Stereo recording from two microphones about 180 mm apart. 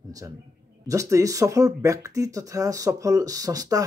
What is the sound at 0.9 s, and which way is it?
Speech, 20° right (ahead or behind).